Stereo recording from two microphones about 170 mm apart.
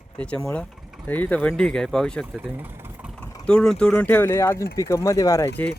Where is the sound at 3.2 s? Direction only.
5° left (ahead or behind).